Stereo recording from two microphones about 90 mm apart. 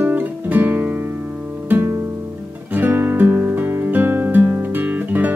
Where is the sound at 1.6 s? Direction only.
25° right (ahead or behind).